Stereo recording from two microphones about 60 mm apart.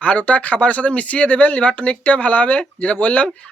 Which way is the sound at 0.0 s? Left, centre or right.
Left.